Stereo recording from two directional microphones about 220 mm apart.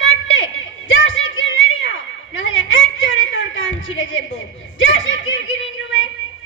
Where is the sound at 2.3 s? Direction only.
60° left (ahead or behind).